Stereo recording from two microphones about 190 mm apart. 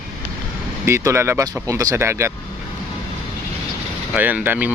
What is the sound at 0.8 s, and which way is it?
Speech, 15° right (ahead or behind).